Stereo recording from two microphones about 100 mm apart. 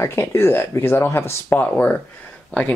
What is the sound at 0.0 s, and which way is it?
Speech, 25° left (ahead or behind).